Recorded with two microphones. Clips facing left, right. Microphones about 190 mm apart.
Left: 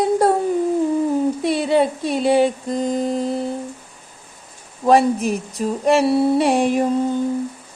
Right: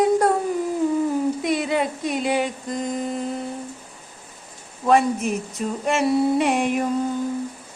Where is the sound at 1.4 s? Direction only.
30° left (ahead or behind).